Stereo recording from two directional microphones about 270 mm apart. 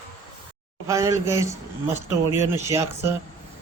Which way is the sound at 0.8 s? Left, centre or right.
Centre.